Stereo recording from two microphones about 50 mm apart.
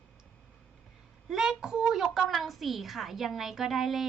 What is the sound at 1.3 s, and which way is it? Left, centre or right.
A child's voice, centre.